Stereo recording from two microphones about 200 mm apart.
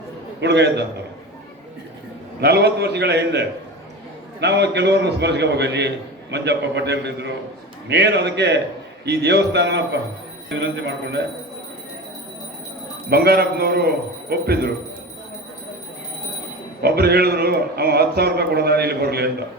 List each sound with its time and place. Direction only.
0.3 s a man's voice: 60° right (ahead or behind)
2.4 s a man's voice: 55° right (ahead or behind)
13.1 s a man's voice: 50° right (ahead or behind)
16.8 s a man's voice: 50° right (ahead or behind)